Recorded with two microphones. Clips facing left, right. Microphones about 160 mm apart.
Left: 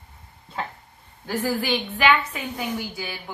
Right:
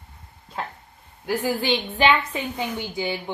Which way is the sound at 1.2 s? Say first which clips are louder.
Right 1 dB; 20° right (ahead or behind).